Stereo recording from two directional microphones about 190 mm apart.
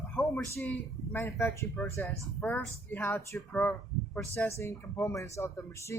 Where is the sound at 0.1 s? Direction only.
10° left (ahead or behind).